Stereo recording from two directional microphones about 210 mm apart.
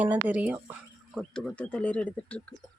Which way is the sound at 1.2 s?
5° left (ahead or behind).